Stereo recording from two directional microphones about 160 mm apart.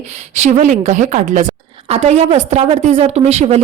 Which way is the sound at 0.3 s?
45° right (ahead or behind).